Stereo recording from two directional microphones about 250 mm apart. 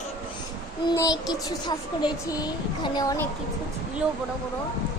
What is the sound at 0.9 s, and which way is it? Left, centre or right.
Speech, centre.